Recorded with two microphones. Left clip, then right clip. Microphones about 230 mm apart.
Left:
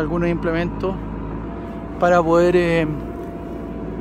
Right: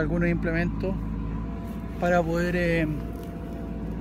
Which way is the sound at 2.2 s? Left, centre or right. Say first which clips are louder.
Left 11 dB; centre.